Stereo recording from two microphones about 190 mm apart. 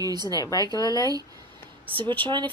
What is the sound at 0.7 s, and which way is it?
Speech, 20° left (ahead or behind).